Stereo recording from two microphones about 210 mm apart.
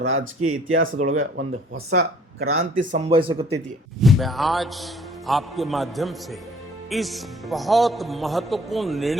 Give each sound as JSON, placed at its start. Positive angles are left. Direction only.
{"t": 0.0, "sound": "speech", "side_deg": -75}
{"t": 2.7, "sound": "speech", "side_deg": -35}
{"t": 4.0, "sound": "a man's voice", "side_deg": 0}